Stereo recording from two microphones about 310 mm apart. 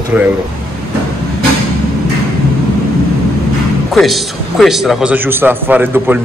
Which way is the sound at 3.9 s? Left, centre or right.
Centre.